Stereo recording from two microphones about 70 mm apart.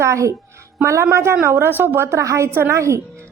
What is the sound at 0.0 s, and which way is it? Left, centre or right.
A woman's voice, right.